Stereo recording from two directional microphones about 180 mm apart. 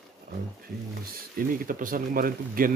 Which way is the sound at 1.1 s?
50° right (ahead or behind).